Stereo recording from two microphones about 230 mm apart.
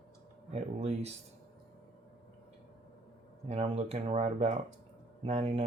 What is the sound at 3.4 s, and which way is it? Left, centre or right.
Speech, right.